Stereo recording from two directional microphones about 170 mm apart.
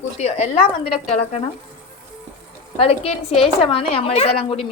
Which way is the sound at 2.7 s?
35° left (ahead or behind).